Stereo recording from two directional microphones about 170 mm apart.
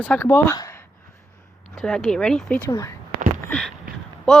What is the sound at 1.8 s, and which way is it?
Speech, 5° left (ahead or behind).